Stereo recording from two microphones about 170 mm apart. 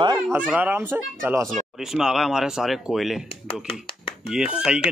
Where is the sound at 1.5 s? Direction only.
Centre (ahead or behind).